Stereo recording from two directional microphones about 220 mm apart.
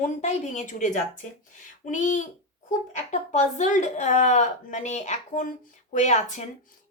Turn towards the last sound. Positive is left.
turn(degrees=30)  # may be behind; listen again after turning